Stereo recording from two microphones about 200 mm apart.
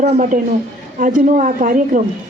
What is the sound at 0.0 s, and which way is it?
A woman's voice, 40° right (ahead or behind).